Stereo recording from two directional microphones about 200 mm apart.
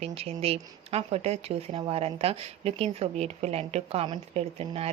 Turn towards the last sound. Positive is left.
turn(degrees=-30)  # may be behind; listen again after turning